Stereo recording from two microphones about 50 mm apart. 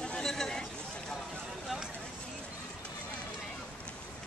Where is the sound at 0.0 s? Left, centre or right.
Centre.